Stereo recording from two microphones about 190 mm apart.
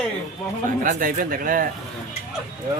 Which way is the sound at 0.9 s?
45° right (ahead or behind).